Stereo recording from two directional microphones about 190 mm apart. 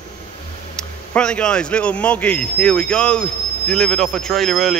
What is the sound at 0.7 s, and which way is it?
Speech, 5° left (ahead or behind).